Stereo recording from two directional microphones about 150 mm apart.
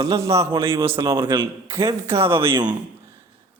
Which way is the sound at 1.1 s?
30° right (ahead or behind).